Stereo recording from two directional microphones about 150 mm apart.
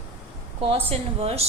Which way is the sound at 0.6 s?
40° right (ahead or behind).